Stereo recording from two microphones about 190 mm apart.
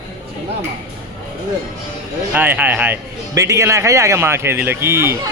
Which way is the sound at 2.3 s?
10° right (ahead or behind).